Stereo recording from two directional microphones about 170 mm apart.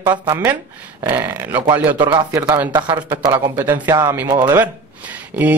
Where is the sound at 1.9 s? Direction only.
30° right (ahead or behind).